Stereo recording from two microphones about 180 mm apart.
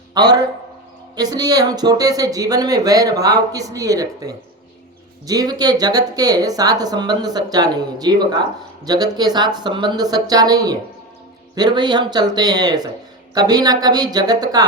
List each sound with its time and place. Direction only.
0.1 s a man's voice: 25° right (ahead or behind)